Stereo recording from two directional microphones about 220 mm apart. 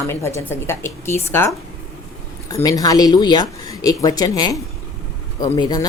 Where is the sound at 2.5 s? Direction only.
15° left (ahead or behind).